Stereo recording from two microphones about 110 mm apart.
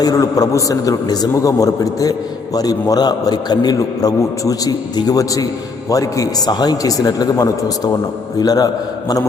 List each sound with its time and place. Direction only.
0.0 s a man's voice: 35° left (ahead or behind)